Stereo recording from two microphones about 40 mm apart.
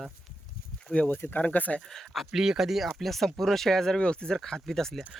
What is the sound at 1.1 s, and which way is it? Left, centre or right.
Speech, left.